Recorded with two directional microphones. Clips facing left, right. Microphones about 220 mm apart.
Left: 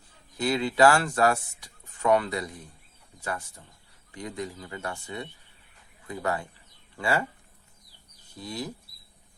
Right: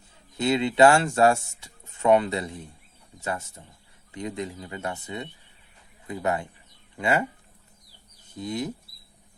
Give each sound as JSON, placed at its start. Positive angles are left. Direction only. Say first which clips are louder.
{"t": 0.3, "sound": "speech", "louder": "right 3 dB", "side_deg": -25}
{"t": 8.4, "sound": "speech", "louder": "right 5 dB", "side_deg": -20}